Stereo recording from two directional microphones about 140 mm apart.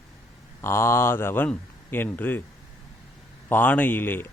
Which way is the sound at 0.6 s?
20° left (ahead or behind).